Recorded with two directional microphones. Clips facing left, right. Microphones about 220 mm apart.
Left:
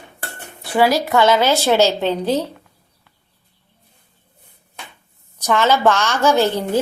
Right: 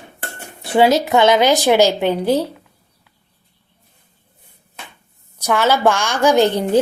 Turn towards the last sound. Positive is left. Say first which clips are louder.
# right 2 dB
turn(degrees=-15)  # may be behind; listen again after turning